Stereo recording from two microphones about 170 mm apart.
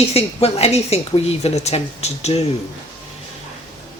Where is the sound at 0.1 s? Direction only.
35° left (ahead or behind).